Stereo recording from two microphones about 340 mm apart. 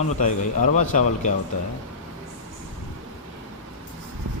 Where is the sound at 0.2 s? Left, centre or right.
Left.